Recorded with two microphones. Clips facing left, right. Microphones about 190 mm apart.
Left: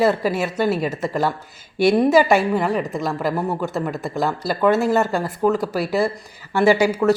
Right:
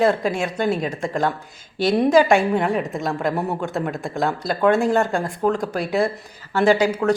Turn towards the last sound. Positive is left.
turn(degrees=10)  # may be behind; listen again after turning